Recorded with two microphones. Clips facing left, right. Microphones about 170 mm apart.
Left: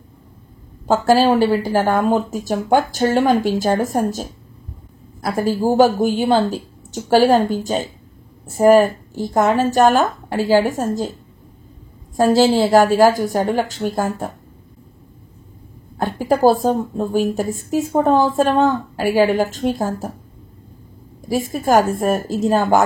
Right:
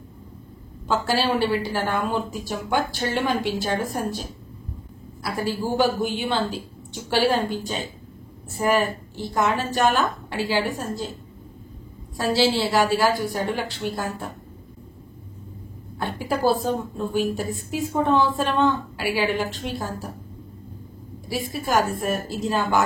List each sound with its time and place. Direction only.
0.8 s a woman's voice: 45° left (ahead or behind)
12.2 s a woman's voice: 45° left (ahead or behind)
16.0 s a woman's voice: 45° left (ahead or behind)
21.3 s a woman's voice: 45° left (ahead or behind)